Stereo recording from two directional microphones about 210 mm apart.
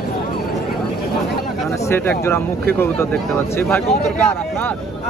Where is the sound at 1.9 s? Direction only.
10° left (ahead or behind).